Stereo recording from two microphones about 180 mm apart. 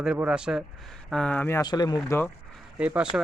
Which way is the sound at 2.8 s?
5° right (ahead or behind).